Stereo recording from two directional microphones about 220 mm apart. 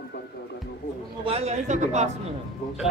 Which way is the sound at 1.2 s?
30° right (ahead or behind).